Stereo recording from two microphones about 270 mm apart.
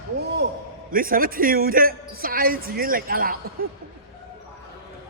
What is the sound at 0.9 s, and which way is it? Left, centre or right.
Speech, right.